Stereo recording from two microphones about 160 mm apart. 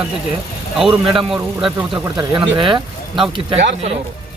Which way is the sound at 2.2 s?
30° right (ahead or behind).